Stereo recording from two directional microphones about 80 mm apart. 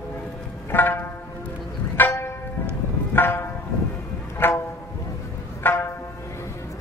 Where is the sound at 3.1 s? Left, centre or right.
Left.